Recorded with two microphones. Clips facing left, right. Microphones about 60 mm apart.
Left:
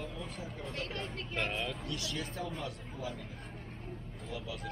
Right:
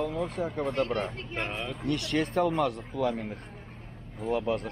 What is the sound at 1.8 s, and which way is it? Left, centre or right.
Speech, right.